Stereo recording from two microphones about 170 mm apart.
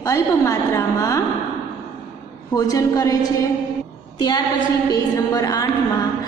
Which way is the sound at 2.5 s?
20° left (ahead or behind).